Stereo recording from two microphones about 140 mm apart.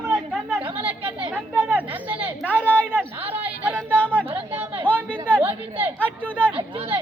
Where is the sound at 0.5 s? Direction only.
10° right (ahead or behind).